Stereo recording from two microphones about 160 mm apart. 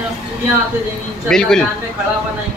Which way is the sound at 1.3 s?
5° left (ahead or behind).